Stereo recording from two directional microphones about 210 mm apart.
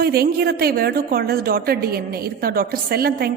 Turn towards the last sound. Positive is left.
turn(degrees=-45)  # may be behind; listen again after turning